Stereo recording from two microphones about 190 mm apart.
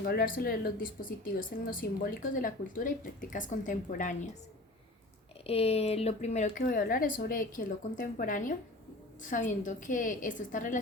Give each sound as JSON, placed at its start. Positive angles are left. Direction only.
{"t": 0.0, "sound": "a woman's voice", "side_deg": 50}
{"t": 5.5, "sound": "a woman's voice", "side_deg": 30}